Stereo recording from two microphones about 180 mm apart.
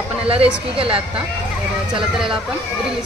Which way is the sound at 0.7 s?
30° right (ahead or behind).